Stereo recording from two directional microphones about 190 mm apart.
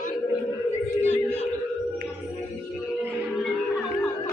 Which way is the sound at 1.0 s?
35° left (ahead or behind).